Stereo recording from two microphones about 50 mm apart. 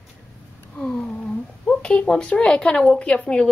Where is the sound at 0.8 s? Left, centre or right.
Centre.